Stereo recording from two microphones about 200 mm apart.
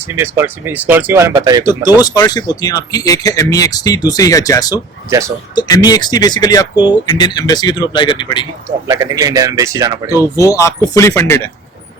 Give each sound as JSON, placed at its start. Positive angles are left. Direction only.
{"t": 0.2, "sound": "speech", "side_deg": -10}
{"t": 1.6, "sound": "speech", "side_deg": 20}
{"t": 8.9, "sound": "speech", "side_deg": -15}
{"t": 10.1, "sound": "speech", "side_deg": 15}